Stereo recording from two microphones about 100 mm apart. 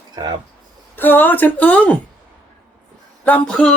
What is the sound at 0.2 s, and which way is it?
Speech, 40° right (ahead or behind).